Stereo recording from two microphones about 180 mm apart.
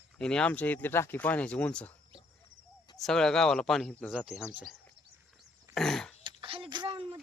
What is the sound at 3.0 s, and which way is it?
Speech, 5° left (ahead or behind).